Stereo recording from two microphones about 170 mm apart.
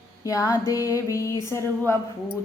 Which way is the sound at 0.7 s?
20° left (ahead or behind).